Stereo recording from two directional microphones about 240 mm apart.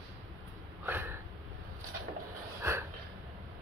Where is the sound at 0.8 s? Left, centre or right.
Centre.